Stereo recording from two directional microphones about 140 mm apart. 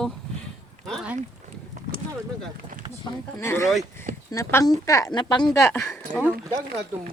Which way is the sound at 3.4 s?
20° left (ahead or behind).